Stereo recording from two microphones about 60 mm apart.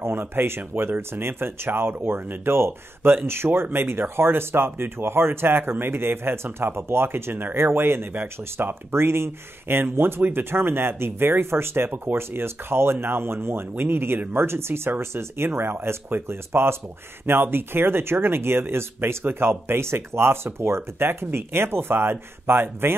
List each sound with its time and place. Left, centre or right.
0.0 s speech: right
8.1 s speech: right
8.9 s speech: right